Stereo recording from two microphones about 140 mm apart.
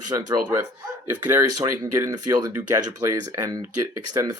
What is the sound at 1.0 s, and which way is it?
Speech, 20° right (ahead or behind).